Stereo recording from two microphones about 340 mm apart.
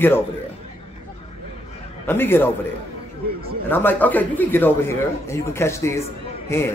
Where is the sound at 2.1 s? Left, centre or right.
Centre.